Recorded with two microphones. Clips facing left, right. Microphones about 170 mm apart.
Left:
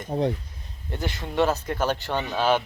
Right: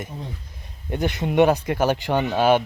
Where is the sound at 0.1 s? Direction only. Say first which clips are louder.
Left 12 dB; 60° left (ahead or behind).